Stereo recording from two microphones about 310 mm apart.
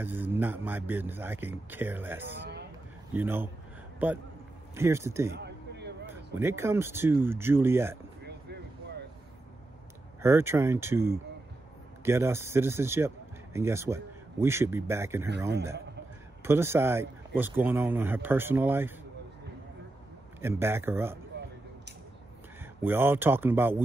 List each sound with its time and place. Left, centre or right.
0.0 s a man's voice: centre
5.3 s a sound: right
6.3 s a man's voice: centre
10.2 s a man's voice: centre
16.4 s a man's voice: centre
20.3 s a man's voice: centre
22.8 s a man's voice: centre